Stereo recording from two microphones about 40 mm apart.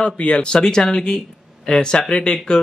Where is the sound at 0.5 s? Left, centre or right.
Centre.